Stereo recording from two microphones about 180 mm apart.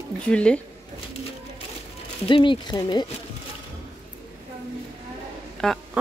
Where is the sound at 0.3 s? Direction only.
5° left (ahead or behind).